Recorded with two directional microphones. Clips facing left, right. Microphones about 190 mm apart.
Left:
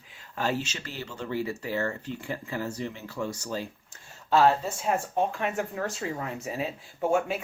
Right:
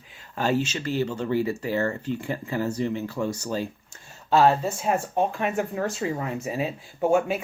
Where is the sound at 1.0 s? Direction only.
50° right (ahead or behind).